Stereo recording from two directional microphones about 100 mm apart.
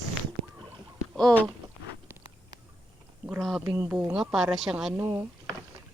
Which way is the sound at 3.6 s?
20° right (ahead or behind).